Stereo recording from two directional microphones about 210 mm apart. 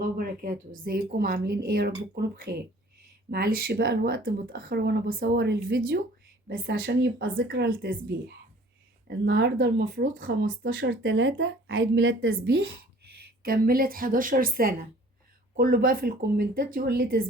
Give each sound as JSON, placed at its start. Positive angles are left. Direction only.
{"t": 0.0, "sound": "a woman's voice", "side_deg": -40}
{"t": 10.6, "sound": "a woman's voice", "side_deg": -65}